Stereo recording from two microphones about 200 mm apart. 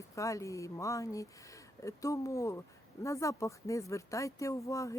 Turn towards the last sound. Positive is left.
turn(degrees=15)  # may be behind; listen again after turning